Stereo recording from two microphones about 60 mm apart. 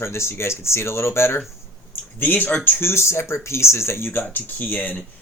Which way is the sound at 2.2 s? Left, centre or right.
Left.